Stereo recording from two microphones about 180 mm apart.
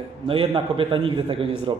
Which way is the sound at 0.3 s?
30° right (ahead or behind).